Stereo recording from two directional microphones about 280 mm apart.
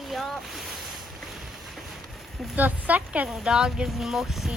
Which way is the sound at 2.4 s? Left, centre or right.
Centre.